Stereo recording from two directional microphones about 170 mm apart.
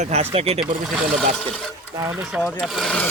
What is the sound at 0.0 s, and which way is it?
Speech, 40° right (ahead or behind).